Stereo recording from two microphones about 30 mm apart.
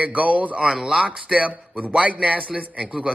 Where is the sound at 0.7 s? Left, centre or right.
Right.